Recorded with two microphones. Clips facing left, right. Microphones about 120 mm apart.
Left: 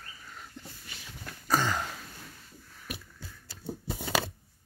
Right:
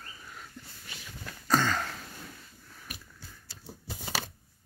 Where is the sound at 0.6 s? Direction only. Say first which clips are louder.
Left 2 dB; 25° left (ahead or behind).